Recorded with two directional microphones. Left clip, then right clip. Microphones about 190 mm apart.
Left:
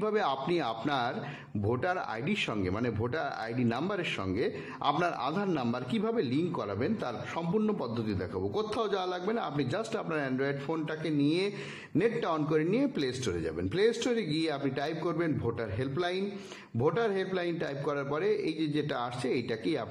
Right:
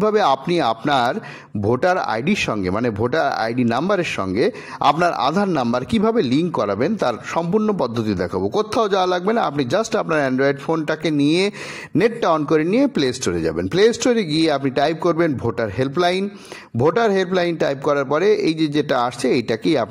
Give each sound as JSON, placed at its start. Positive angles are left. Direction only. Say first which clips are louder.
{"t": 0.0, "sound": "a man's voice", "louder": "right 13 dB", "side_deg": -40}